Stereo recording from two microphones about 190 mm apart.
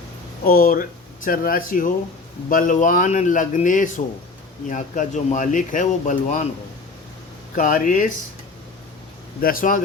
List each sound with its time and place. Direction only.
0.4 s speech: 45° left (ahead or behind)
7.5 s speech: 45° left (ahead or behind)
9.4 s speech: 50° left (ahead or behind)